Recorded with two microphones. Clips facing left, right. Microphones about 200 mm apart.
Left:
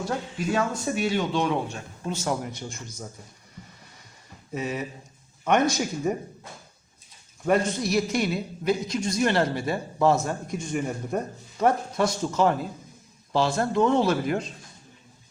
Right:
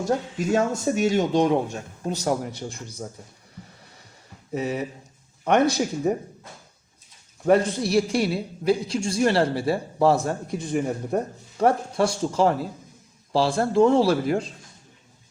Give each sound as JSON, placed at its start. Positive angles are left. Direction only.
{"t": 0.0, "sound": "a man's voice", "side_deg": -45}
{"t": 4.5, "sound": "a man's voice", "side_deg": -35}
{"t": 7.5, "sound": "a man's voice", "side_deg": -35}